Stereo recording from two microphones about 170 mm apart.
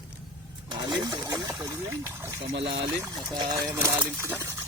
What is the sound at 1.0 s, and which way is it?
Speech, 25° right (ahead or behind).